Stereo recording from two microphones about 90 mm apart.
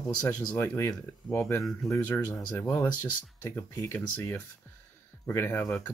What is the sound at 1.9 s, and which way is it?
Speech, 25° left (ahead or behind).